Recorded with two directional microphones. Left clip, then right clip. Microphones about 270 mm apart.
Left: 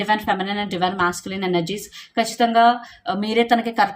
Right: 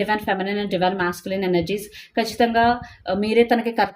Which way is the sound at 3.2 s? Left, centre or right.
Centre.